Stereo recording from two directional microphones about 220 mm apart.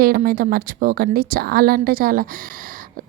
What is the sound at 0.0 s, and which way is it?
A woman's voice, 40° right (ahead or behind).